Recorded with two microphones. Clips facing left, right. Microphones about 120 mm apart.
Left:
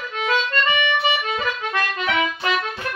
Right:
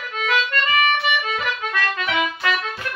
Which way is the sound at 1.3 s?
25° left (ahead or behind).